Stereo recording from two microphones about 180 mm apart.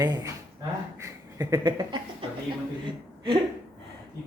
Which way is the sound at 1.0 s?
20° right (ahead or behind).